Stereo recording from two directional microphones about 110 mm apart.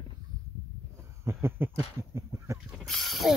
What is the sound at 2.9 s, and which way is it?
Mechanisms, centre (ahead or behind).